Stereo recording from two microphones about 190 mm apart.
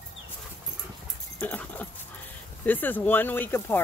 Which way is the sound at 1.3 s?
10° left (ahead or behind).